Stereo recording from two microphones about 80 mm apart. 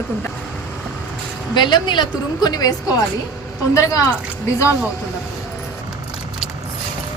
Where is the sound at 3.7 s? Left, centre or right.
Left.